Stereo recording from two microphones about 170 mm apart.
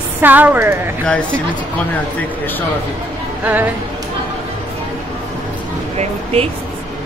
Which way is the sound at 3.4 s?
10° right (ahead or behind).